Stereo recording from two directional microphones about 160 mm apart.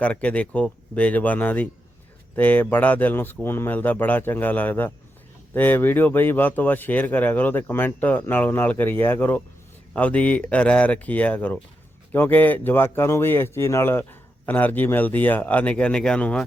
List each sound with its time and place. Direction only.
0.0 s speech: 10° left (ahead or behind)